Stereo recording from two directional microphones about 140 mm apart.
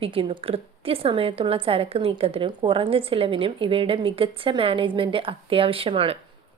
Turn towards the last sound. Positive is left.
turn(degrees=-40)  # may be behind; listen again after turning